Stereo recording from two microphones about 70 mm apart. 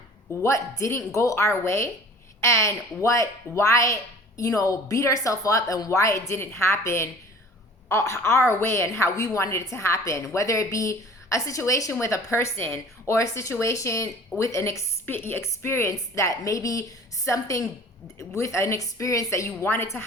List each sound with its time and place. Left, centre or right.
0.4 s a woman's voice: left
15.0 s a woman's voice: left